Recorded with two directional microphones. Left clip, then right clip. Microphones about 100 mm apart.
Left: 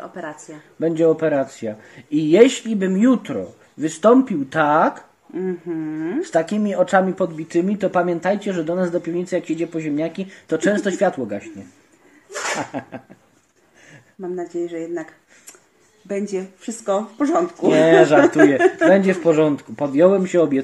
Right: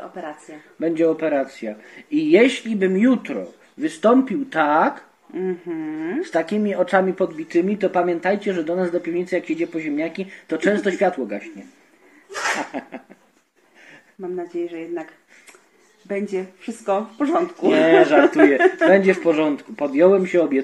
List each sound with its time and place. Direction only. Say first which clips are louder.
0.0 s speech: left 1 dB; 25° left (ahead or behind)
0.7 s speech: left 2 dB; 45° left (ahead or behind)
2.9 s speech: left 3 dB; 40° left (ahead or behind)
3.8 s speech: left 2 dB; 50° left (ahead or behind)
5.3 s speech: even; centre (ahead or behind)
6.2 s speech: left 1 dB; 45° left (ahead or behind)
12.7 s speech: left 1 dB; 45° left (ahead or behind)
14.2 s speech: left 1 dB; 30° left (ahead or behind)
16.1 s speech: even; centre (ahead or behind)
16.6 s speech: left 1 dB; 20° left (ahead or behind)
17.7 s speech: left 2 dB; 45° left (ahead or behind)
18.6 s speech: left 1 dB; centre (ahead or behind)
18.9 s speech: left 1 dB; 50° left (ahead or behind); by 20.3 s 35° left (ahead or behind)
20.3 s speech: left 1 dB; 45° left (ahead or behind)